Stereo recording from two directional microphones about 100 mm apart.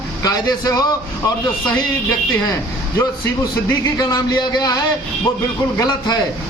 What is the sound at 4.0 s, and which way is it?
Speech, 40° left (ahead or behind).